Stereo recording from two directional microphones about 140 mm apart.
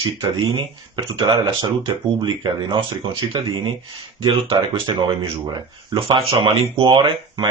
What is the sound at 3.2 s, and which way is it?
Speech, 35° right (ahead or behind).